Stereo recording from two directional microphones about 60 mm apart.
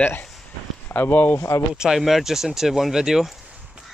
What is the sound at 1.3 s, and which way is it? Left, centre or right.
Speech, left.